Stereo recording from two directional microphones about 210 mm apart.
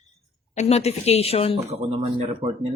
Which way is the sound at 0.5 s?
30° left (ahead or behind).